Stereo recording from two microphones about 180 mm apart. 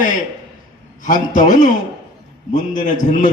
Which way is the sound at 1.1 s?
45° left (ahead or behind).